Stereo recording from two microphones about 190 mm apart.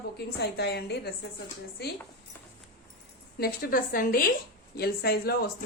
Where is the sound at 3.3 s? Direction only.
50° left (ahead or behind).